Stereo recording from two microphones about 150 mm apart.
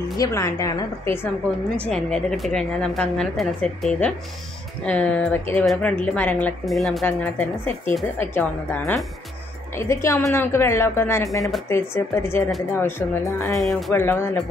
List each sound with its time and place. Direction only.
0.2 s a woman's voice: 20° left (ahead or behind)
1.9 s a woman's voice: 5° left (ahead or behind)
6.6 s a woman's voice: centre (ahead or behind)
7.1 s a woman's voice: 10° left (ahead or behind)
13.6 s a woman's voice: centre (ahead or behind)
13.9 s a woman's voice: 15° left (ahead or behind)